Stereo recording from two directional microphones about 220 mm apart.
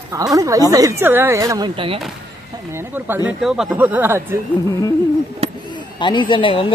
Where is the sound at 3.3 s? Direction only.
5° right (ahead or behind).